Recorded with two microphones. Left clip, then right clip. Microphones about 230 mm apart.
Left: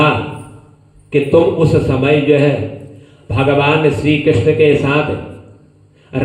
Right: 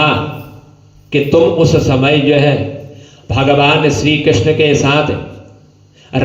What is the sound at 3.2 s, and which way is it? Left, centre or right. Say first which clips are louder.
A man's voice: right 3 dB; right.